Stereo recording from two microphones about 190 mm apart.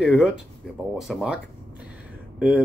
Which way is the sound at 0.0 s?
5° right (ahead or behind).